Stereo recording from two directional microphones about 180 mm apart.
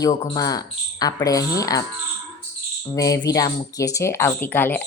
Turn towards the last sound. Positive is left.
turn(degrees=10)  # may be behind; listen again after turning